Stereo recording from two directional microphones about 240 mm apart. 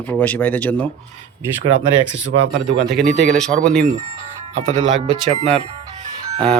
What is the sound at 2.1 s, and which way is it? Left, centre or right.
Speech, right.